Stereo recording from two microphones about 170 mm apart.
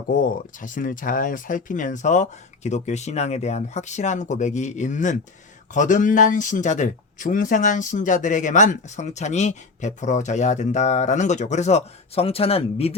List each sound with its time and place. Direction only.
0.6 s speech: 50° left (ahead or behind); by 12.9 s 35° left (ahead or behind)